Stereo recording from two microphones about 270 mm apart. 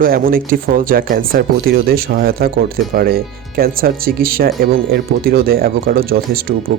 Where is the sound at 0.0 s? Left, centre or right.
Right.